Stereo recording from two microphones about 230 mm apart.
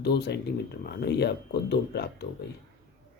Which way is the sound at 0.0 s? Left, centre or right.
Left.